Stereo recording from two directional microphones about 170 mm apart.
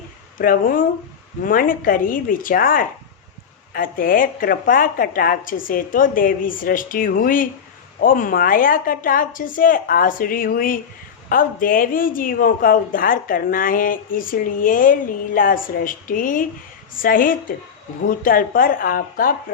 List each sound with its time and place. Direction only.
0.3 s speech: 55° left (ahead or behind)